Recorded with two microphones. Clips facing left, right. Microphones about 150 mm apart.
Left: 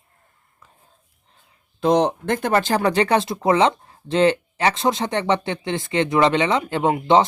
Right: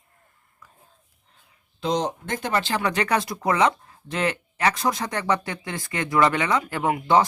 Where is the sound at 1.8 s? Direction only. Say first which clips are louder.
Left 7 dB; 60° left (ahead or behind).